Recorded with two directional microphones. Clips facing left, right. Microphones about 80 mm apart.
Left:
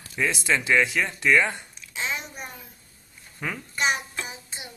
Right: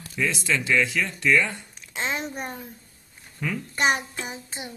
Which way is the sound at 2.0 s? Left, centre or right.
Right.